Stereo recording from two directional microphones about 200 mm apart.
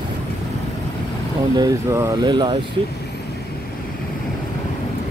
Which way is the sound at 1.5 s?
15° right (ahead or behind).